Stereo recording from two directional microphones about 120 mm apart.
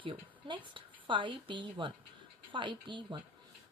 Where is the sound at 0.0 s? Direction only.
45° right (ahead or behind).